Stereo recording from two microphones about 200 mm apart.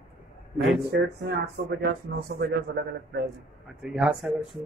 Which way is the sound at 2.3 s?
50° right (ahead or behind).